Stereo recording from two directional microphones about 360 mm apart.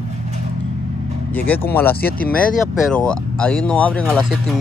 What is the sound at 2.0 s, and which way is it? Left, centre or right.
Speech, left.